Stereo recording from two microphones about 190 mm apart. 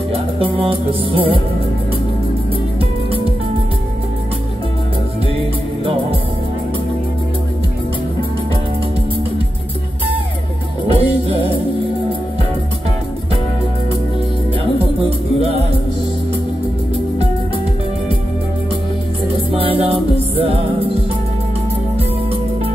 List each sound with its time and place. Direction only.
0.1 s music: 30° right (ahead or behind)
10.9 s music: 30° right (ahead or behind)
19.5 s music: 30° right (ahead or behind)